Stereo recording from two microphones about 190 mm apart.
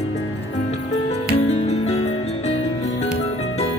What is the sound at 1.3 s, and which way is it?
Music, 35° left (ahead or behind).